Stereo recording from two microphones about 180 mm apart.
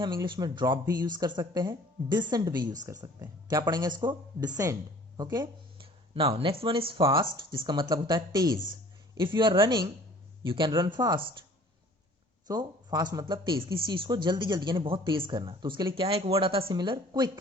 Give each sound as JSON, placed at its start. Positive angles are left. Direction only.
{"t": 0.0, "sound": "speech", "side_deg": -25}
{"t": 12.5, "sound": "speech", "side_deg": -20}